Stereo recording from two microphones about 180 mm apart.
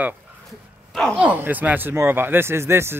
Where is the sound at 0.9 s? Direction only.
5° left (ahead or behind).